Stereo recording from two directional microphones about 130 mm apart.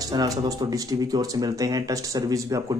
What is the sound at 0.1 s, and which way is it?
Speech, 30° right (ahead or behind).